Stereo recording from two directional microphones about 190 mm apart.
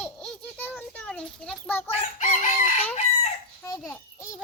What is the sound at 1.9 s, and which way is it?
Chicken, 35° left (ahead or behind).